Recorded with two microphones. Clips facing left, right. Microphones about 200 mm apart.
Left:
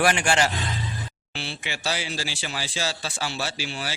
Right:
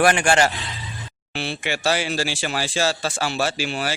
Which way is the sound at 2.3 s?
60° right (ahead or behind).